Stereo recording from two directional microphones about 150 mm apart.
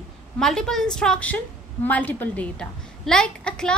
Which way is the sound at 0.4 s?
5° left (ahead or behind).